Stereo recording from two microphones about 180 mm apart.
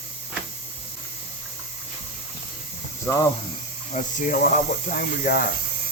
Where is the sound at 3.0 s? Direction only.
20° left (ahead or behind).